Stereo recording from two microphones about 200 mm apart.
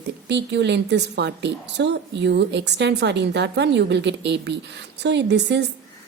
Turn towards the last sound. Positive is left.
turn(degrees=-60)  # may be behind; listen again after turning